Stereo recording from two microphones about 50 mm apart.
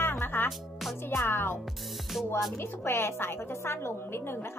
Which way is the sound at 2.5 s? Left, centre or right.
Left.